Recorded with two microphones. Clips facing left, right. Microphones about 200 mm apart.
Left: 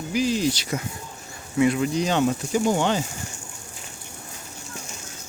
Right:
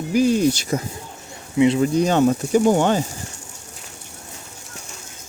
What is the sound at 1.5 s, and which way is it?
Speech, 25° right (ahead or behind).